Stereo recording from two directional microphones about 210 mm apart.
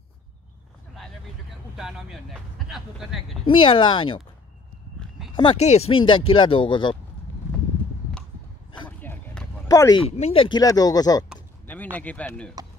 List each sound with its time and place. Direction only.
1.8 s speech: centre (ahead or behind)
3.4 s speech: 25° left (ahead or behind)
5.3 s speech: 25° left (ahead or behind)
9.0 s a sound: 5° left (ahead or behind)
9.7 s speech: 15° left (ahead or behind)
10.0 s speech: 30° left (ahead or behind); by 12.5 s 5° left (ahead or behind)